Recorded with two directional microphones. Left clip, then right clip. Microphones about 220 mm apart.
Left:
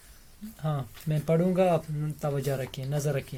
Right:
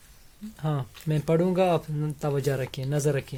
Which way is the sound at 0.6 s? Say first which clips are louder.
Right 3 dB; 50° right (ahead or behind).